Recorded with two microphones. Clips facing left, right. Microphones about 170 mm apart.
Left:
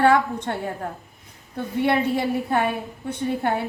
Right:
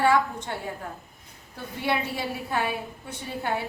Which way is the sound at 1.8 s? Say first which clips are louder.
Left 6 dB; 55° left (ahead or behind).